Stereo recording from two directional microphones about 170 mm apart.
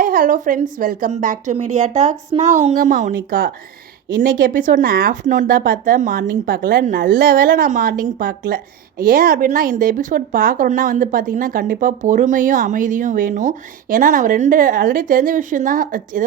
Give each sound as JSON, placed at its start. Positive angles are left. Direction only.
{"t": 0.0, "sound": "speech", "side_deg": -50}